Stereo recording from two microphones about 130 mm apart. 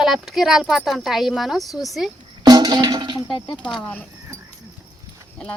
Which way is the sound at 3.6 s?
5° left (ahead or behind).